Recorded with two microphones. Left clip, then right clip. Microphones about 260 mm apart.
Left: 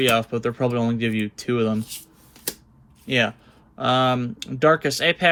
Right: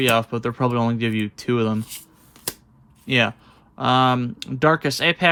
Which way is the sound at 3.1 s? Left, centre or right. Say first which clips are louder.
Right 2 dB; centre.